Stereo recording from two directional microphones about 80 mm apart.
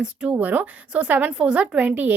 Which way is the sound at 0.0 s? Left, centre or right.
Centre.